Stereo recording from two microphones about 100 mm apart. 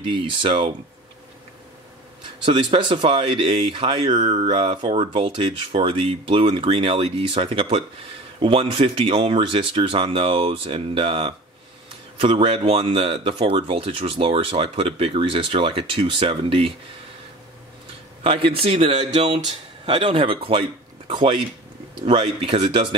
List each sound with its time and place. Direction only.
0.1 s speech: 55° right (ahead or behind)
2.4 s speech: 55° right (ahead or behind)
4.6 s speech: 65° right (ahead or behind)
18.2 s speech: 65° right (ahead or behind)
21.1 s speech: 55° right (ahead or behind)